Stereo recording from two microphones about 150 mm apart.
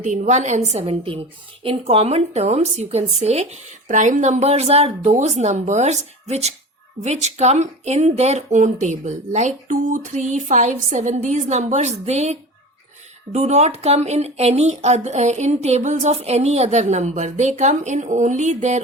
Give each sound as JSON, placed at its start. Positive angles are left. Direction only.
{"t": 0.0, "sound": "speech", "side_deg": -50}